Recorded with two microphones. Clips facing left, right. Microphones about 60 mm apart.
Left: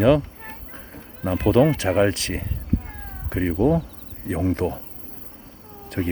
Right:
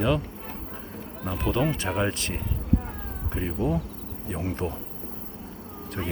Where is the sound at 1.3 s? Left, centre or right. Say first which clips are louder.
Left 9 dB; left.